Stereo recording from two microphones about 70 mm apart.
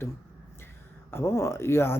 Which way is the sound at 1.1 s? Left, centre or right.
Left.